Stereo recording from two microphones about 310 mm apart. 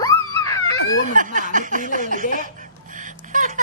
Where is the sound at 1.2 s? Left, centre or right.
Right.